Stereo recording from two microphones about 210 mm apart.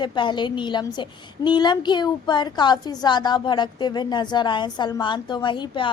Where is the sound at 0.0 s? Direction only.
20° left (ahead or behind).